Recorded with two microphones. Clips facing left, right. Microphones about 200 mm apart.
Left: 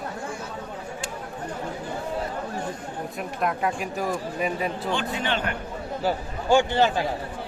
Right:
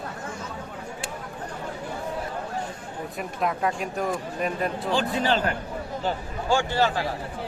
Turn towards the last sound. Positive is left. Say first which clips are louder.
# left 3 dB
turn(degrees=20)  # may be behind; listen again after turning